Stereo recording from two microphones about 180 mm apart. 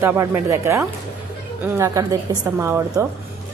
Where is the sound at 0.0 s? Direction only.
15° right (ahead or behind).